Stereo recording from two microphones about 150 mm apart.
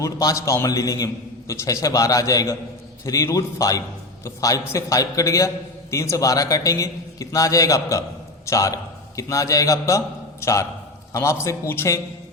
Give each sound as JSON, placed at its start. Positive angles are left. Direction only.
{"t": 0.0, "sound": "a man's voice", "side_deg": 20}